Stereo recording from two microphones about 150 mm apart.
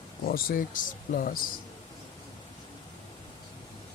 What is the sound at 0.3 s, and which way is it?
Speech, 75° left (ahead or behind).